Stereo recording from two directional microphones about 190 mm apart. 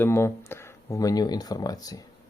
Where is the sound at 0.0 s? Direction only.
15° left (ahead or behind).